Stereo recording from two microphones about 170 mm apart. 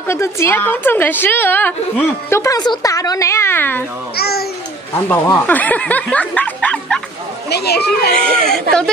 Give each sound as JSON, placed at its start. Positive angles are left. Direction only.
{"t": 0.0, "sound": "a woman's voice", "side_deg": 15}
{"t": 4.1, "sound": "a child's voice", "side_deg": 65}
{"t": 5.0, "sound": "a woman's voice", "side_deg": 10}
{"t": 7.4, "sound": "speech", "side_deg": 75}
{"t": 8.2, "sound": "speech", "side_deg": 5}